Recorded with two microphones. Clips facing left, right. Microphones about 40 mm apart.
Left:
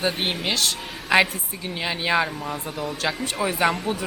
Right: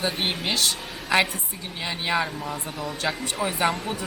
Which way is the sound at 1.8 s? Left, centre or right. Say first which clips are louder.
Left 3 dB; left.